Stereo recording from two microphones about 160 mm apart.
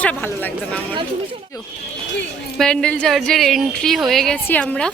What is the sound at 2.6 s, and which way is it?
A woman's voice, 5° left (ahead or behind).